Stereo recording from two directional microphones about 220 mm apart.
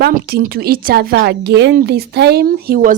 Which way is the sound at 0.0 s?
45° right (ahead or behind).